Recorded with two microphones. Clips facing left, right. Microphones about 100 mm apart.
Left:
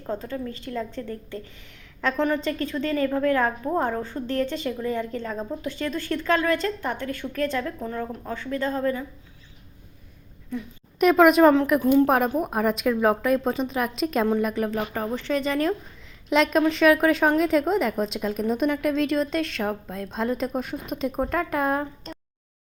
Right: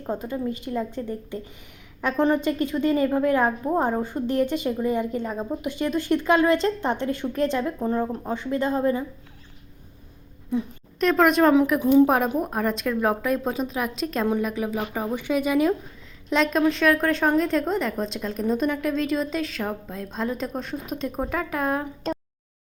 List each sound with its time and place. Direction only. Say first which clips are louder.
0.0 s a woman's voice: right 2 dB; 15° right (ahead or behind)
10.5 s a woman's voice: right 6 dB; 15° right (ahead or behind)
10.9 s a woman's voice: left 3 dB; 5° left (ahead or behind); by 15.7 s 10° right (ahead or behind)
16.3 s a woman's voice: left 1 dB; centre (ahead or behind)